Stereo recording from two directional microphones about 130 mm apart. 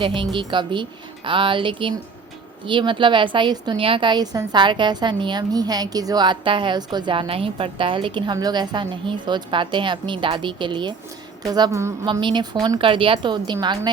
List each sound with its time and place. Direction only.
0.0 s a woman's voice: 40° right (ahead or behind)